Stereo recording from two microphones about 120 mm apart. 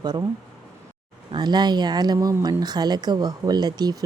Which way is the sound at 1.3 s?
35° right (ahead or behind).